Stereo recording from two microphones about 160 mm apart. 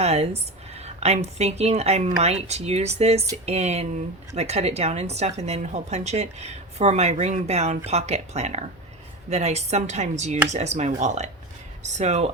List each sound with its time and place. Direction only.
0.0 s a woman's voice: 40° right (ahead or behind)